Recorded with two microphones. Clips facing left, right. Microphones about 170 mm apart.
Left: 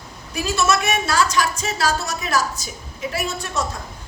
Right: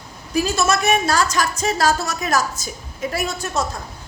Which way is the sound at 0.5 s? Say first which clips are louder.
Left 1 dB; 40° right (ahead or behind).